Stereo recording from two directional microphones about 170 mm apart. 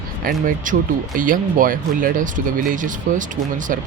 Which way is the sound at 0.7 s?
50° right (ahead or behind).